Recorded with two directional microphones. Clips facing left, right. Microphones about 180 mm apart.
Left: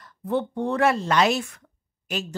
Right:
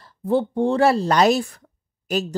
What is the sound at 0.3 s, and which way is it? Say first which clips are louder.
Speech: right 5 dB; 30° right (ahead or behind).